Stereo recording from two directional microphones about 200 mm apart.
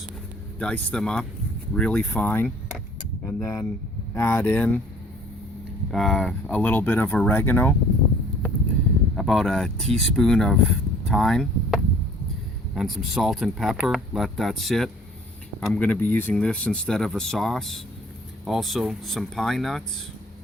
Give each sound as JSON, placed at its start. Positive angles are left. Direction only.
{"t": 0.6, "sound": "speech", "side_deg": 5}
{"t": 5.9, "sound": "speech", "side_deg": 0}
{"t": 9.1, "sound": "speech", "side_deg": 0}